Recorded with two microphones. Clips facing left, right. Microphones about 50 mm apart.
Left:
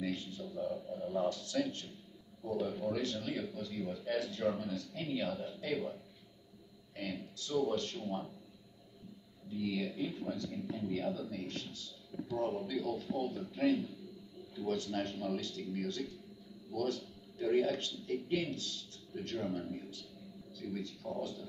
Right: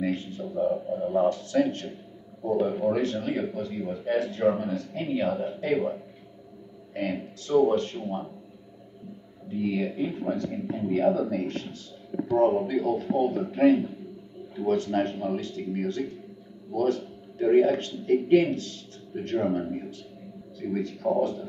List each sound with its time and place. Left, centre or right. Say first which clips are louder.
0.0 s speech: right 10 dB; right
1.7 s a man's voice: right 11 dB; right
2.4 s speech: right 11 dB; right
9.5 s a man's voice: right 9 dB; right